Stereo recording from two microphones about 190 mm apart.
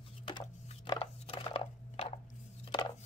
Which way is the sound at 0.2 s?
30° left (ahead or behind).